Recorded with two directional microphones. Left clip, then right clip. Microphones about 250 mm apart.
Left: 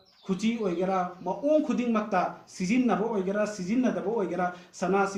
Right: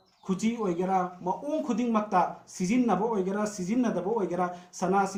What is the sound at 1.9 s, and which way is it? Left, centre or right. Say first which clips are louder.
Speech: right 3 dB; right.